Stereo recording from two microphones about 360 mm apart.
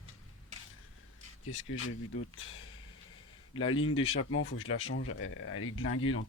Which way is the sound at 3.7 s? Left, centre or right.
Left.